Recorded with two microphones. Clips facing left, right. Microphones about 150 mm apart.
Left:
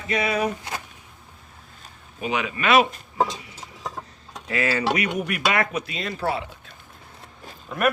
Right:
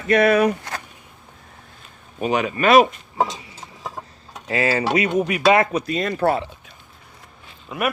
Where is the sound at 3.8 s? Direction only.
5° right (ahead or behind).